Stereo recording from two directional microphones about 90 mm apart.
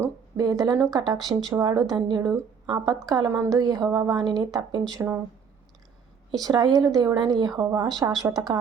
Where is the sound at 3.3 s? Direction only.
35° right (ahead or behind).